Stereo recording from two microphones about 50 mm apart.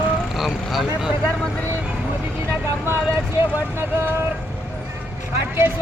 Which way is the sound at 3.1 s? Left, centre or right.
Right.